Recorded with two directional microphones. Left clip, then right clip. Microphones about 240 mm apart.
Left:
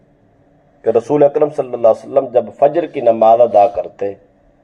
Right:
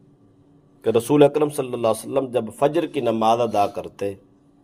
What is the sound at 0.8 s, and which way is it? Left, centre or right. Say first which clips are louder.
A man's voice: left 5 dB; right.